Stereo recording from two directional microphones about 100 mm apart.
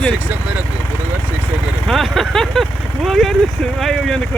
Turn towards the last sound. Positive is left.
turn(degrees=0)  # may be behind; listen again after turning